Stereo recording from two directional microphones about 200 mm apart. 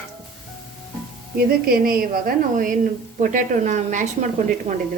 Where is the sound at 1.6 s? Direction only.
50° right (ahead or behind); by 4.8 s 30° right (ahead or behind).